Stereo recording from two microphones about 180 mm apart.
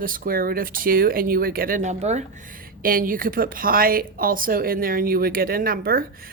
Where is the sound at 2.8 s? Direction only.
50° right (ahead or behind).